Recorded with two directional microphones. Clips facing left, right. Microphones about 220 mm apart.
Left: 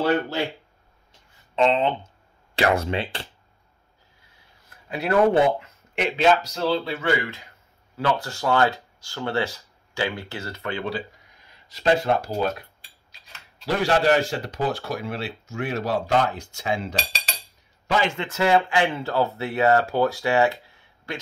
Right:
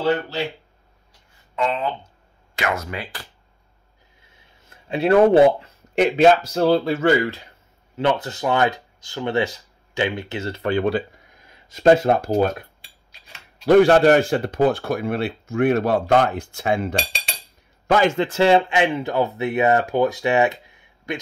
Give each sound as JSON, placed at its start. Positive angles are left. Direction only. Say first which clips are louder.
{"t": 1.5, "sound": "speech", "louder": "left 3 dB", "side_deg": 25}
{"t": 4.3, "sound": "a sound", "louder": "right 3 dB", "side_deg": -25}
{"t": 6.0, "sound": "speech", "louder": "right 5 dB", "side_deg": -45}
{"t": 7.9, "sound": "speech", "louder": "right 4 dB", "side_deg": -20}
{"t": 10.9, "sound": "speech", "louder": "right 7 dB", "side_deg": -55}
{"t": 13.7, "sound": "speech", "louder": "right 8 dB", "side_deg": -55}
{"t": 17.9, "sound": "speech", "louder": "right 6 dB", "side_deg": -45}
{"t": 20.6, "sound": "a sound", "louder": "right 5 dB", "side_deg": -15}